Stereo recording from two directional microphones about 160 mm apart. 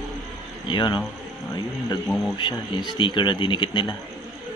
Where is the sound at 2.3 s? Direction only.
30° left (ahead or behind).